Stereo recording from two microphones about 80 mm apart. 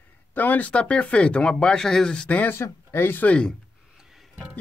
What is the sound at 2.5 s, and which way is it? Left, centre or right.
Speech, left.